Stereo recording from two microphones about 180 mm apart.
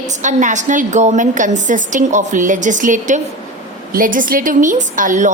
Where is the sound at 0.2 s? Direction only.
45° right (ahead or behind).